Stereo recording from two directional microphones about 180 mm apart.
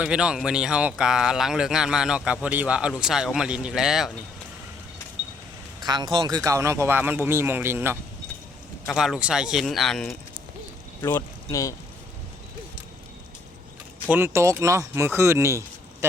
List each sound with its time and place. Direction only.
0.0 s speech: 5° right (ahead or behind)
5.8 s speech: 25° right (ahead or behind)
8.9 s speech: centre (ahead or behind)
11.0 s speech: 15° left (ahead or behind)
14.1 s speech: 15° right (ahead or behind)